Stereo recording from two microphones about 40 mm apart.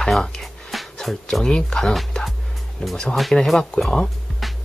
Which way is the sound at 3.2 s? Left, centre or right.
Centre.